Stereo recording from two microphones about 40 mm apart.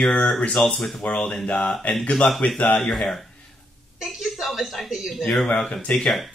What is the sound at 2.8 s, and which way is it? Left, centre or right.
Speech, centre.